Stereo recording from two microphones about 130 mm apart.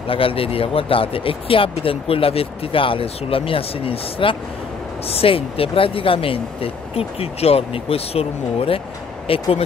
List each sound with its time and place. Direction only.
0.1 s speech: 45° left (ahead or behind)